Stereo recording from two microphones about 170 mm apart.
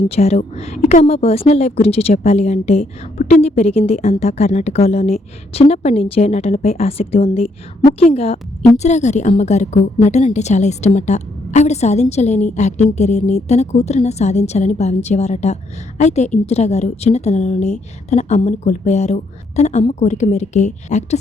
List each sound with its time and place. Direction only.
0.1 s a woman's voice: 40° left (ahead or behind)